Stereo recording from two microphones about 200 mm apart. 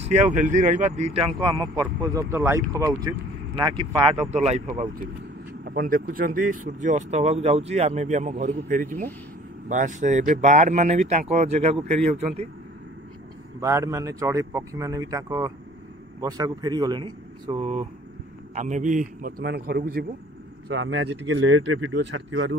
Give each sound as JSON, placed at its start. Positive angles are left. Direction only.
{"t": 0.0, "sound": "speech", "side_deg": -35}
{"t": 5.8, "sound": "speech", "side_deg": -45}
{"t": 13.6, "sound": "a man's voice", "side_deg": -15}
{"t": 20.6, "sound": "speech", "side_deg": -65}